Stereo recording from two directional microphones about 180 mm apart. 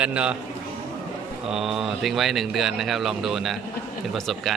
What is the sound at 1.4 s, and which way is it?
A man's voice, 5° right (ahead or behind).